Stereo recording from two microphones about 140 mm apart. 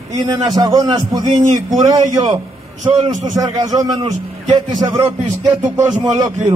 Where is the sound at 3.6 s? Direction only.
25° right (ahead or behind).